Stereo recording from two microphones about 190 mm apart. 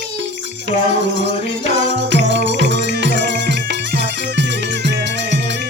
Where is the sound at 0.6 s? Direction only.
70° right (ahead or behind).